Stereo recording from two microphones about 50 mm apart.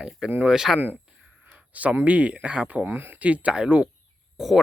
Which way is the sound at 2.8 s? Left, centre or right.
Right.